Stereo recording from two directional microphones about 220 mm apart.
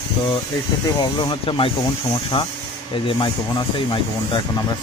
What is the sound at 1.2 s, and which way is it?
Speech, 25° left (ahead or behind).